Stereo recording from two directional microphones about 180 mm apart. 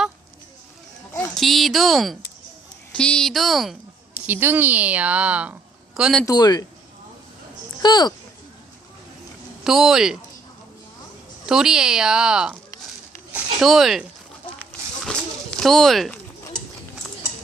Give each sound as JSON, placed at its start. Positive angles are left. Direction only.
{"t": 1.1, "sound": "a woman's voice", "side_deg": 5}
{"t": 6.2, "sound": "speech", "side_deg": 20}
{"t": 7.8, "sound": "speech", "side_deg": 25}
{"t": 9.6, "sound": "speech", "side_deg": 0}
{"t": 11.4, "sound": "speech", "side_deg": -5}
{"t": 14.6, "sound": "a sound", "side_deg": 5}
{"t": 16.4, "sound": "bird", "side_deg": 20}